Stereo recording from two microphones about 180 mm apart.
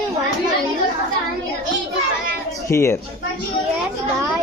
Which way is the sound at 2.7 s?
15° left (ahead or behind).